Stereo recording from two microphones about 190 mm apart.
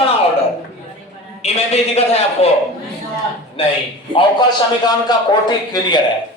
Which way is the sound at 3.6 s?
30° left (ahead or behind).